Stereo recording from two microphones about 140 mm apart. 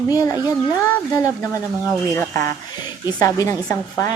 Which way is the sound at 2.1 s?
20° left (ahead or behind).